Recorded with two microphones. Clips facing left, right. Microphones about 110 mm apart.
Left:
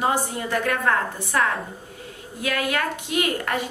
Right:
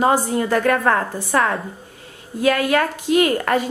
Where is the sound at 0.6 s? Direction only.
40° right (ahead or behind).